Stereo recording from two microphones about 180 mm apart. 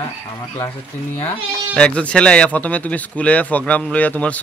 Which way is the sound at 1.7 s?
5° left (ahead or behind).